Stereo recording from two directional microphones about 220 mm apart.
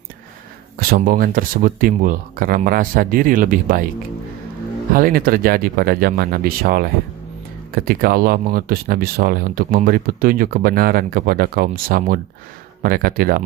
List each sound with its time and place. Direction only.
0.8 s speech: 40° right (ahead or behind)
4.9 s speech: 40° right (ahead or behind)